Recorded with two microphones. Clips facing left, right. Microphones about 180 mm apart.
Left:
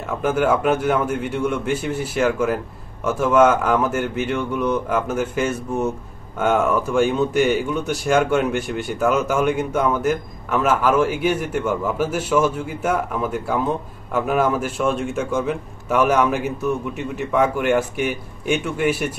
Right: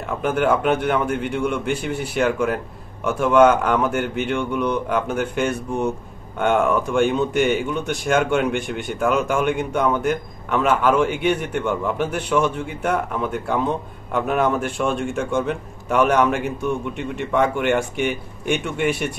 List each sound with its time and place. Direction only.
0.2 s speech: centre (ahead or behind)